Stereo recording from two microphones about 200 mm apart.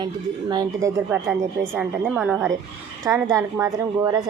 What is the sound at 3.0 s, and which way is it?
A woman's voice, 15° right (ahead or behind).